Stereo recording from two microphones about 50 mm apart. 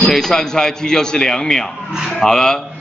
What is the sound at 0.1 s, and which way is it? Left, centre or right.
A man's voice, centre.